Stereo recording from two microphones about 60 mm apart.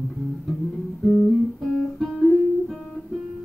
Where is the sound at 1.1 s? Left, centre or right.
Centre.